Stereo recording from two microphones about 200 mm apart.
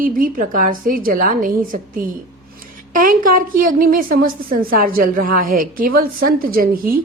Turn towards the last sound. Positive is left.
turn(degrees=-45)  # may be behind; listen again after turning